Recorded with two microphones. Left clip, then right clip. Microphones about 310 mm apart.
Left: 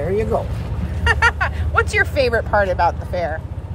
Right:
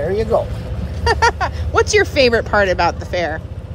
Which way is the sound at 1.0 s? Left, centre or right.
Centre.